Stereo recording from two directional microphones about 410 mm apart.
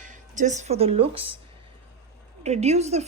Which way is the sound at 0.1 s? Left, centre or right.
Centre.